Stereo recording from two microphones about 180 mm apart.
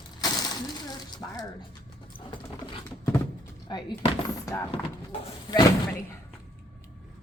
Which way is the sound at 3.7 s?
25° left (ahead or behind).